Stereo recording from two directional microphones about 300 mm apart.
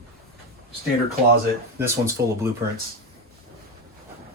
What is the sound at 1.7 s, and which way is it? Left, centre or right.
Speech, centre.